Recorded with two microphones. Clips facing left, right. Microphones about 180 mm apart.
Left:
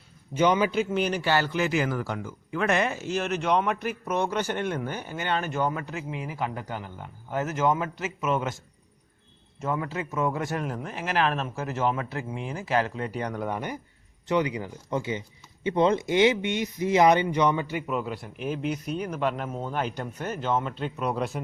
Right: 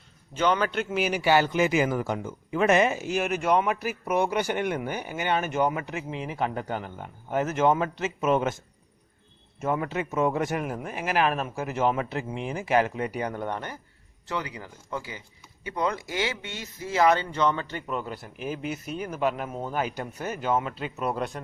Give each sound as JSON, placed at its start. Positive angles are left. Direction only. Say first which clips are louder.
{"t": 0.3, "sound": "a man's voice", "louder": "left 2 dB", "side_deg": 10}
{"t": 0.9, "sound": "speech", "louder": "right 2 dB", "side_deg": -5}
{"t": 9.6, "sound": "speech", "louder": "right 2 dB", "side_deg": -20}